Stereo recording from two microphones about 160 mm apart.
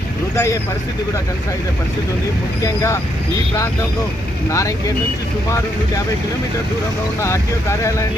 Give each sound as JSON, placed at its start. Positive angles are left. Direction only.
{"t": 0.3, "sound": "speech", "side_deg": 20}
{"t": 2.6, "sound": "speech", "side_deg": 20}
{"t": 4.4, "sound": "speech", "side_deg": 20}
{"t": 7.2, "sound": "speech", "side_deg": 15}